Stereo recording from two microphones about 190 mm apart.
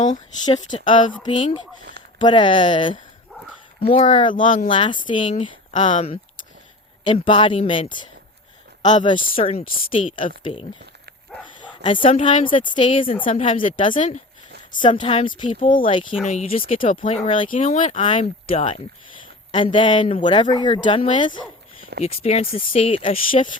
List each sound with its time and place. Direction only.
0.4 s speech: 25° left (ahead or behind)
11.3 s speech: centre (ahead or behind)
11.8 s speech: 25° left (ahead or behind)
15.4 s speech: 45° left (ahead or behind); by 17.5 s 30° left (ahead or behind)
17.5 s speech: 40° left (ahead or behind)
18.0 s speech: 30° left (ahead or behind)